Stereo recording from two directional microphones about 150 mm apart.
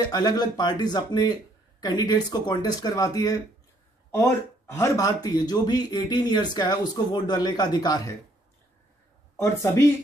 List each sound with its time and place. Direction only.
0.0 s speech: 25° left (ahead or behind)
9.4 s speech: 20° left (ahead or behind)